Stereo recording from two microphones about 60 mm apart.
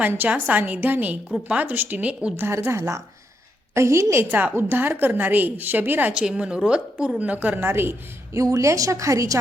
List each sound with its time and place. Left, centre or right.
0.3 s a woman's voice: right
2.5 s speech: right
4.3 s a woman's voice: right
6.1 s a woman's voice: centre
7.7 s speech: right
8.4 s a woman's voice: right